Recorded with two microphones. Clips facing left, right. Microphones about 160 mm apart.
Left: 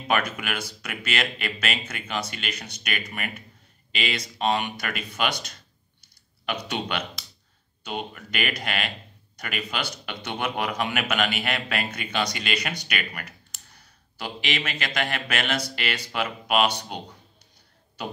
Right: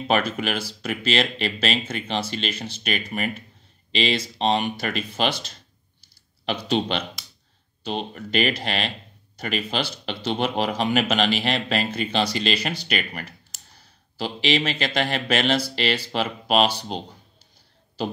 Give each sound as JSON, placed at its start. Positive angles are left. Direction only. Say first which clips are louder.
{"t": 0.1, "sound": "speech", "louder": "right 3 dB", "side_deg": -30}